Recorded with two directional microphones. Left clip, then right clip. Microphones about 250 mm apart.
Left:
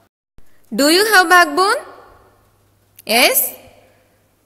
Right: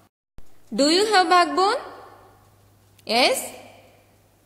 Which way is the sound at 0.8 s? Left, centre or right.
Left.